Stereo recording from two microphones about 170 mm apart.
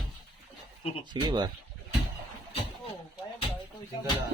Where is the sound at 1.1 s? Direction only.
25° right (ahead or behind).